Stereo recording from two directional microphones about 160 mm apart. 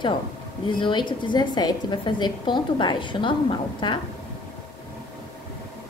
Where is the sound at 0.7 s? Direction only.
30° left (ahead or behind).